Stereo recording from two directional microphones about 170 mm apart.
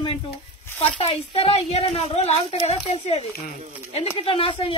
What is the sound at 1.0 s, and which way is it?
A woman's voice, 35° left (ahead or behind).